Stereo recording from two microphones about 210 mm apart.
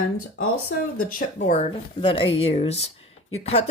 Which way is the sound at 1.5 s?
30° left (ahead or behind).